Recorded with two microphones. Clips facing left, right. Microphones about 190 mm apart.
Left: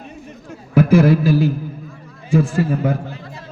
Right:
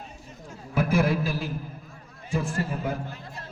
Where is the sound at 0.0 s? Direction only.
70° left (ahead or behind).